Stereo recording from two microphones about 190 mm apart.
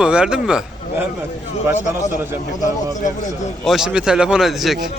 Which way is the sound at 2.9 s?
40° left (ahead or behind).